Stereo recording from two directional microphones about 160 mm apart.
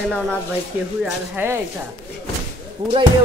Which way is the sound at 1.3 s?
15° right (ahead or behind).